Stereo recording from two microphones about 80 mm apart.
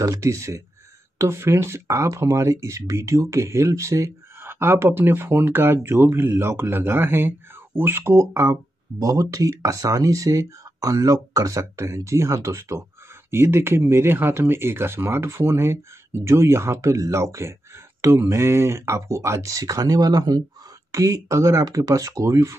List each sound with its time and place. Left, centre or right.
0.0 s speech: right
9.0 s speech: right